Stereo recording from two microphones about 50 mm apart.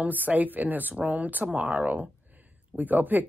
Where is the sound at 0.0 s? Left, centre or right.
Right.